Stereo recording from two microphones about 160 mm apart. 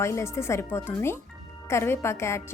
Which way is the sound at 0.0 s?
15° left (ahead or behind).